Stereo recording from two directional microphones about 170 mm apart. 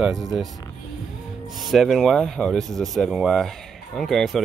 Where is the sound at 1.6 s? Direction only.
Centre (ahead or behind).